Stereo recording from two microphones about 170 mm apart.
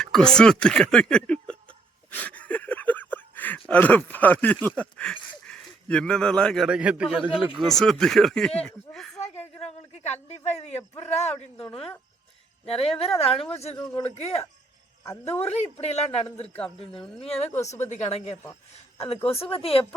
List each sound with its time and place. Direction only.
0.0 s speech: 5° left (ahead or behind)
2.1 s a sound: 10° left (ahead or behind)
3.7 s speech: 10° left (ahead or behind)
9.6 s a woman's voice: 40° left (ahead or behind)
11.5 s a woman's voice: 5° left (ahead or behind)
12.6 s speech: 35° left (ahead or behind)
15.4 s speech: 40° left (ahead or behind)
16.5 s a woman's voice: 5° left (ahead or behind)
17.2 s speech: 35° left (ahead or behind)